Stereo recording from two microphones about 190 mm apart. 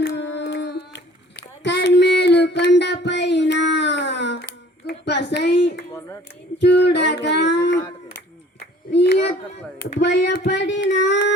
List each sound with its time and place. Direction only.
0.2 s humming: 65° left (ahead or behind)
1.6 s child singing: 70° left (ahead or behind)
8.5 s a sound: 65° left (ahead or behind)
9.8 s child singing: 60° left (ahead or behind)